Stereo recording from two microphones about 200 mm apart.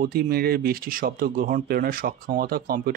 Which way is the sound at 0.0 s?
50° right (ahead or behind).